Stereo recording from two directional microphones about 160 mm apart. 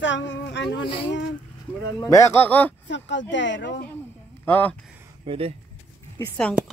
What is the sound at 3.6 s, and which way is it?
Speech, 90° left.